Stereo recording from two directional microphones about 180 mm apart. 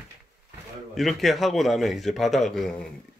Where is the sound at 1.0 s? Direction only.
Centre (ahead or behind).